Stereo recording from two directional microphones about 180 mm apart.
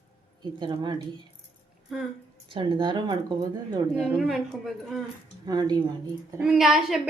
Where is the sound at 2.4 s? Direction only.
25° right (ahead or behind).